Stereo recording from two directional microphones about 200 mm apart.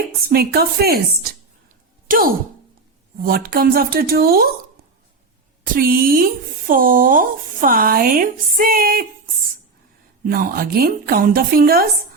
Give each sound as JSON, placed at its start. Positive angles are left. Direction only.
{"t": 0.2, "sound": "speech", "side_deg": -50}
{"t": 5.7, "sound": "speech", "side_deg": -45}
{"t": 10.2, "sound": "speech", "side_deg": -45}